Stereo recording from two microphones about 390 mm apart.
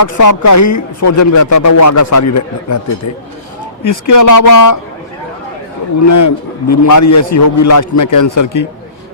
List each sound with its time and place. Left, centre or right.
0.0 s speech: left
3.8 s speech: left
6.1 s speech: left